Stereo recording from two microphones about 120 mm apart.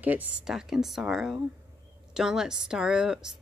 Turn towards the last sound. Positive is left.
turn(degrees=-5)  # may be behind; listen again after turning